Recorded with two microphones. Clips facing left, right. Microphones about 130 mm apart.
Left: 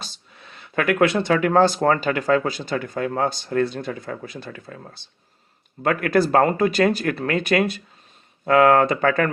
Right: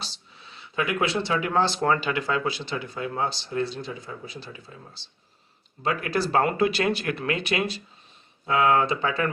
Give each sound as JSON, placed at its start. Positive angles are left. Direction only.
{"t": 0.0, "sound": "speech", "side_deg": 50}